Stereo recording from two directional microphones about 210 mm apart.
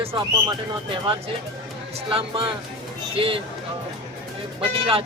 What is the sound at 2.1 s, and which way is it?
Speech, 25° right (ahead or behind).